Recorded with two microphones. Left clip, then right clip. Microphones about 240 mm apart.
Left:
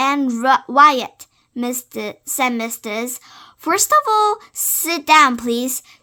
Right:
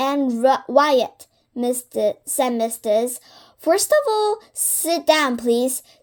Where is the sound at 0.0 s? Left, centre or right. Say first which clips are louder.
Left 1 dB; centre.